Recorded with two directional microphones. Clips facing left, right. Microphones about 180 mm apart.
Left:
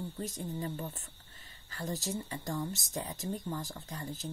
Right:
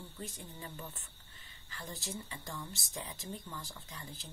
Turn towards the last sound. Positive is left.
turn(degrees=45)  # may be behind; listen again after turning